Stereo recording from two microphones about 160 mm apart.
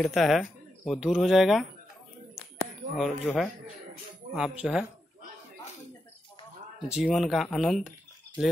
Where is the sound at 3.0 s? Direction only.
Centre (ahead or behind).